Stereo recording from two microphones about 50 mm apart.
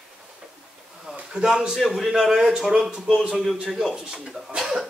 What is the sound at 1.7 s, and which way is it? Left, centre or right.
A man's voice, centre.